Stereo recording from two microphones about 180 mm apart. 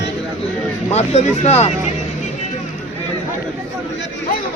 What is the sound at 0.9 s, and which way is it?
Speech, 40° left (ahead or behind).